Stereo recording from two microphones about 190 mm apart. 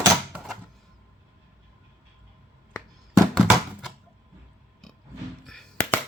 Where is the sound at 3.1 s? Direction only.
Centre (ahead or behind).